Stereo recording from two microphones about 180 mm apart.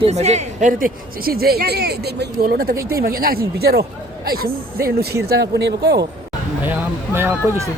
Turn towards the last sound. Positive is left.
turn(degrees=-15)  # may be behind; listen again after turning